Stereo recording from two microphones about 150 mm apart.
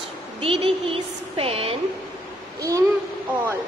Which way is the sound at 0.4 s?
40° right (ahead or behind).